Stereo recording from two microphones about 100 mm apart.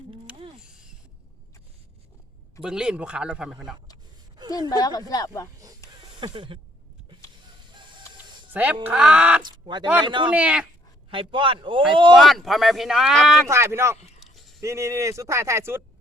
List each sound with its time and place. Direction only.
0.3 s a sound: 60° right (ahead or behind)
0.6 s a sound: 5° right (ahead or behind)
2.6 s speech: 10° right (ahead or behind)
4.4 s a sound: 45° right (ahead or behind)
4.8 s speech: 40° left (ahead or behind)
5.8 s a sound: 30° left (ahead or behind)
6.1 s speech: 50° right (ahead or behind)
7.7 s chicken: 50° right (ahead or behind)
8.5 s speech: 15° right (ahead or behind)
9.4 s speech: 50° right (ahead or behind)
10.3 s speech: 10° right (ahead or behind)
11.1 s speech: 60° right (ahead or behind)
12.1 s speech: centre (ahead or behind)
13.5 s speech: 25° right (ahead or behind)